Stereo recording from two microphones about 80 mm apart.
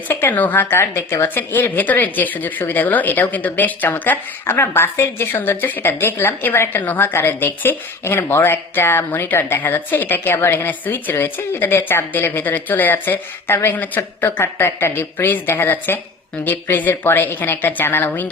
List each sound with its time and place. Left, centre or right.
0.1 s a woman's voice: left